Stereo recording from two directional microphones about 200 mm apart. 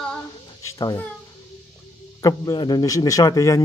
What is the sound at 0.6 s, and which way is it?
Speech, 15° left (ahead or behind).